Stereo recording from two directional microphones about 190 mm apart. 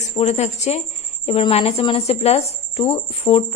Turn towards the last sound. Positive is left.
turn(degrees=30)  # may be behind; listen again after turning